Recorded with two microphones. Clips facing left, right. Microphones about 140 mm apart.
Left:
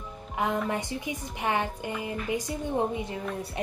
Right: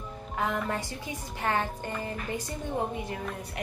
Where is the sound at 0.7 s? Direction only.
20° left (ahead or behind).